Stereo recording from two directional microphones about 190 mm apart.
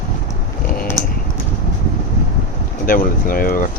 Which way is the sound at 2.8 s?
45° left (ahead or behind).